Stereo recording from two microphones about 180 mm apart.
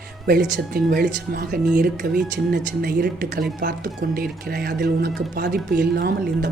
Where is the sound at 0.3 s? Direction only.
55° right (ahead or behind).